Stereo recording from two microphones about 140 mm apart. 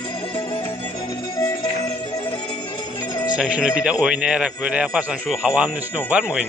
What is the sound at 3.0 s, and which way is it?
Music, 30° left (ahead or behind).